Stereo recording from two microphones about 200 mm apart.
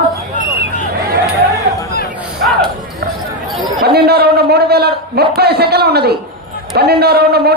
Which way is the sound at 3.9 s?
55° right (ahead or behind).